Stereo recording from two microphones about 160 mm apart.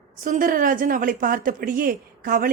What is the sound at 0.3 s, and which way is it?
A woman's voice, 60° right (ahead or behind).